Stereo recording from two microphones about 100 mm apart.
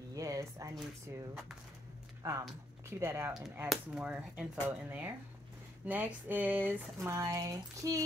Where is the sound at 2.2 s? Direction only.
35° right (ahead or behind).